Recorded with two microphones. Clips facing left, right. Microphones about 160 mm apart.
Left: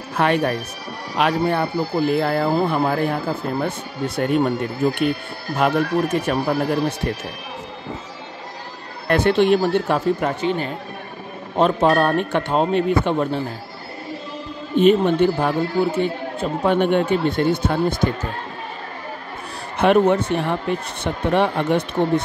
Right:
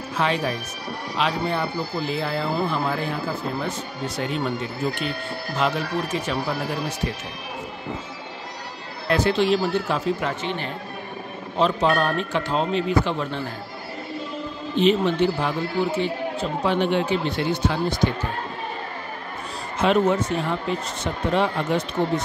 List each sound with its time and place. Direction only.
0.1 s speech: 60° left (ahead or behind)
9.0 s speech: 55° left (ahead or behind)
14.8 s speech: 50° left (ahead or behind)
19.8 s speech: 60° left (ahead or behind)